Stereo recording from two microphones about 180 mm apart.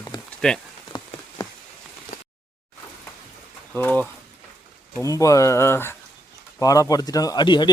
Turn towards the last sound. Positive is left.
turn(degrees=25)  # may be behind; listen again after turning